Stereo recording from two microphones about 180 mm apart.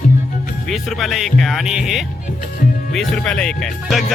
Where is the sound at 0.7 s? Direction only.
Centre (ahead or behind).